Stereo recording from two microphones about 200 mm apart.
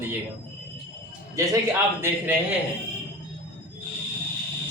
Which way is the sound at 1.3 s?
15° right (ahead or behind).